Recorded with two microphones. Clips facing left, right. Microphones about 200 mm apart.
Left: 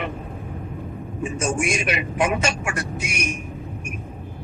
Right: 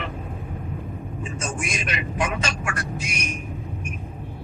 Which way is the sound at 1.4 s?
25° left (ahead or behind).